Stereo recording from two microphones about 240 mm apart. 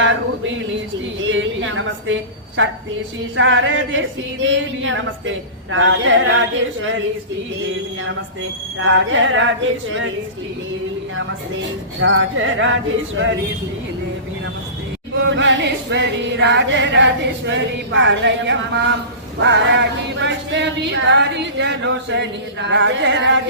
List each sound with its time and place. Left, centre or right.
0.0 s a sound: right
2.6 s singing: right
8.8 s singing: right
11.9 s singing: right
15.1 s singing: right